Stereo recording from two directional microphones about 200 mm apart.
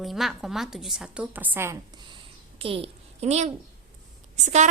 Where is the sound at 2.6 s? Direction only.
30° right (ahead or behind).